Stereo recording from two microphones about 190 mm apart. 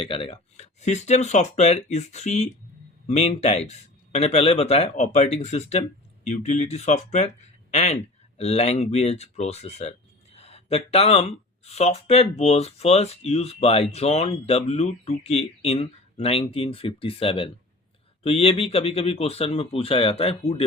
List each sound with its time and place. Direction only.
0.0 s speech: 30° left (ahead or behind)